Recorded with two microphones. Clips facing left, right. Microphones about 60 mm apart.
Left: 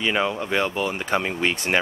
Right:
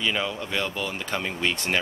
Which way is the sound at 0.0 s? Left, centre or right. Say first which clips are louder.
Left 4 dB; left.